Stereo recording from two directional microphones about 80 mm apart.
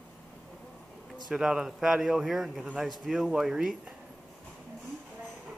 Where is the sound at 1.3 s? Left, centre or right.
Centre.